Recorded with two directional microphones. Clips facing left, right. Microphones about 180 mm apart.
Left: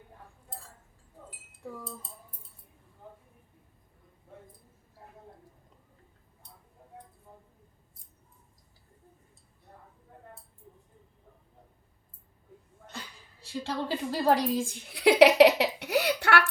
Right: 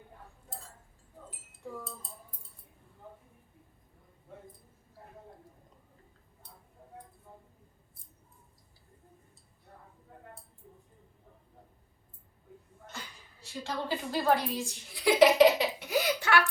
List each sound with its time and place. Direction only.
13.4 s a woman's voice: 35° left (ahead or behind); by 16.5 s 65° left (ahead or behind)